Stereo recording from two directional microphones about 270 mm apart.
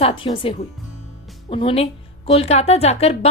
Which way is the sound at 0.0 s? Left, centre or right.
Centre.